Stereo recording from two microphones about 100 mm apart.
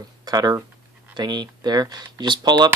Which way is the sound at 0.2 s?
40° right (ahead or behind).